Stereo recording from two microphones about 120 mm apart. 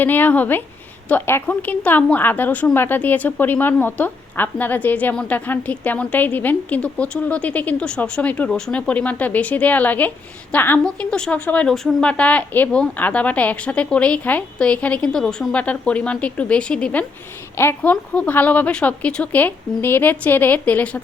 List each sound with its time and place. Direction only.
0.0 s a woman's voice: 15° left (ahead or behind)
10.8 s a woman's voice: 5° left (ahead or behind)
17.6 s a woman's voice: 20° left (ahead or behind)